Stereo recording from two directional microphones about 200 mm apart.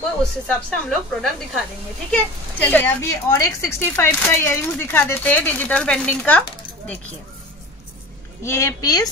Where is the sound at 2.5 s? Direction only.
10° left (ahead or behind).